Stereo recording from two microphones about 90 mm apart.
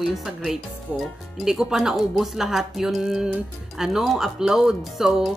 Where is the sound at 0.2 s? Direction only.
5° right (ahead or behind).